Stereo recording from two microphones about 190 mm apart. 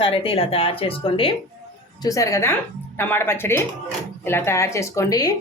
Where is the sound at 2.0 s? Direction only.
15° left (ahead or behind).